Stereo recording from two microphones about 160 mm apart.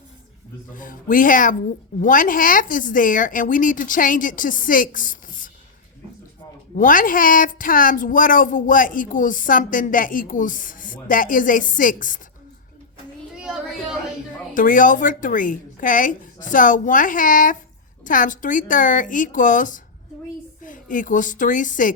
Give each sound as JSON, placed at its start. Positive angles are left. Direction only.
{"t": 0.7, "sound": "speech", "side_deg": 55}
{"t": 6.7, "sound": "speech", "side_deg": 60}
{"t": 13.3, "sound": "children playing", "side_deg": -5}
{"t": 14.5, "sound": "speech", "side_deg": 55}